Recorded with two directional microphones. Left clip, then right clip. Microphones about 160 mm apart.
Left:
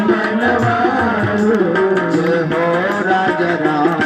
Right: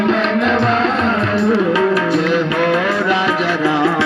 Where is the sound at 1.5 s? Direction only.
60° left (ahead or behind).